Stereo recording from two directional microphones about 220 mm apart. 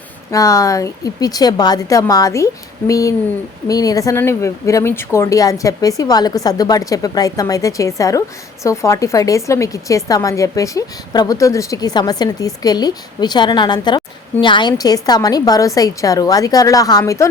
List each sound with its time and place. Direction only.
0.3 s speech: 15° left (ahead or behind)